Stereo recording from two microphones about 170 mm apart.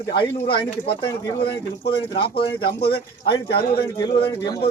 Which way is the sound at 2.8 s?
70° left (ahead or behind).